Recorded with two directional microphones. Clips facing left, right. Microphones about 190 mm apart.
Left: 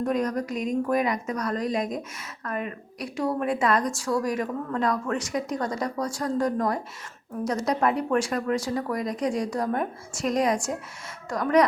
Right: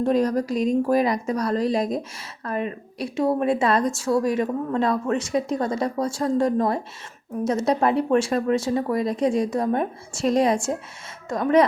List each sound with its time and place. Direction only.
0.0 s speech: 30° right (ahead or behind)